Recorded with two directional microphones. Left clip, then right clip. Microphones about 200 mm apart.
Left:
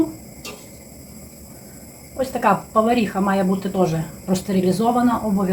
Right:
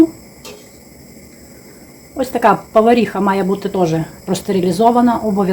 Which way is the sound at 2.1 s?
50° right (ahead or behind).